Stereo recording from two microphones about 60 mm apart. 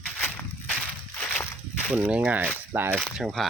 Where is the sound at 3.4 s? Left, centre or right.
Centre.